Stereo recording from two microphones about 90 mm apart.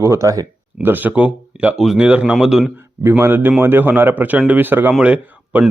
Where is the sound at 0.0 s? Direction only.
35° right (ahead or behind).